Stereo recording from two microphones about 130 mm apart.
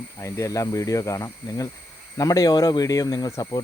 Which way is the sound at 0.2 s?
25° left (ahead or behind).